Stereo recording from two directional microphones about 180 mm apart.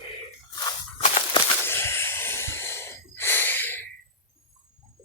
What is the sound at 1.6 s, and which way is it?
Snort, 15° left (ahead or behind).